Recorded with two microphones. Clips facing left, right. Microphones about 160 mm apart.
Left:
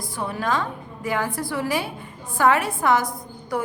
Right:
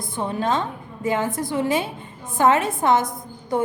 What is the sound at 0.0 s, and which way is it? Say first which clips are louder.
A woman's voice: right 3 dB; 25° right (ahead or behind).